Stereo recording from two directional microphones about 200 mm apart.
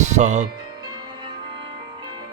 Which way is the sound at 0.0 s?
35° right (ahead or behind).